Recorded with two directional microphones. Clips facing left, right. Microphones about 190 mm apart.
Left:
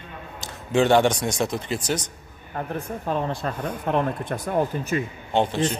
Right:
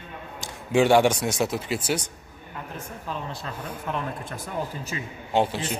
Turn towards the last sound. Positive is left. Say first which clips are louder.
# left 2 dB
turn(degrees=-5)  # may be behind; listen again after turning